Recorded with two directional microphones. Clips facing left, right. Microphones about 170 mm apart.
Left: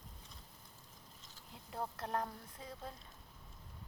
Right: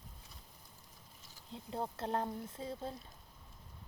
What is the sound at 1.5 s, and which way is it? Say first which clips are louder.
Speech: right 3 dB; 25° right (ahead or behind).